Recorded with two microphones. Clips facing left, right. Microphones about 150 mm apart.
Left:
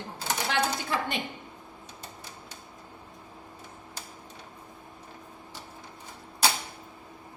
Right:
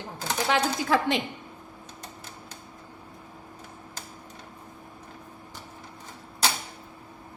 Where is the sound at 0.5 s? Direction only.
90° right.